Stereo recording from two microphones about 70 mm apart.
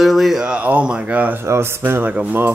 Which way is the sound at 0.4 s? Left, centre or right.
Centre.